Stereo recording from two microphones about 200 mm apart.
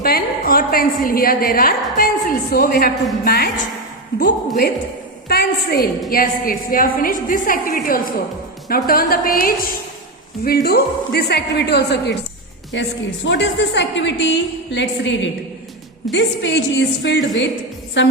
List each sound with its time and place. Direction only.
0.0 s a woman's voice: 50° left (ahead or behind)
12.7 s a woman's voice: 65° left (ahead or behind)